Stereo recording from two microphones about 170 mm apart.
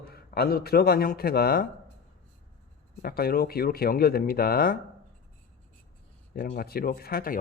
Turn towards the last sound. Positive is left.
turn(degrees=60)  # may be behind; listen again after turning